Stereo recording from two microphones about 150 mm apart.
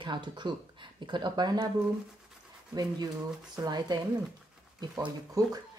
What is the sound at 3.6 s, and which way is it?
Speech, 30° right (ahead or behind).